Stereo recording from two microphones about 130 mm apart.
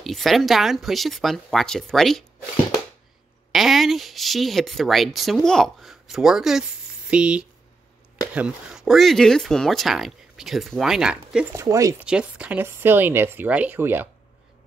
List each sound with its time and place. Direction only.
0.0 s speech: centre (ahead or behind)
3.5 s speech: centre (ahead or behind)
11.5 s speech: 25° right (ahead or behind)
12.0 s speech: 10° right (ahead or behind)